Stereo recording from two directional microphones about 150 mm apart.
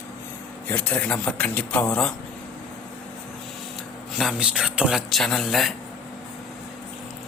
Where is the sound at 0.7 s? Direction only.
10° left (ahead or behind).